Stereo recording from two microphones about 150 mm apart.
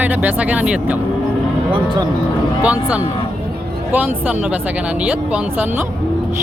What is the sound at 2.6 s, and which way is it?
Speech, 10° right (ahead or behind).